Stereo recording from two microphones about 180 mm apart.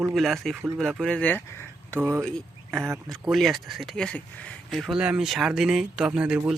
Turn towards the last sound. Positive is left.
turn(degrees=-5)  # may be behind; listen again after turning